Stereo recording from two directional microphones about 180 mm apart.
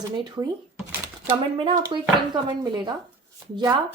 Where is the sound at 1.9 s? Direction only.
25° right (ahead or behind).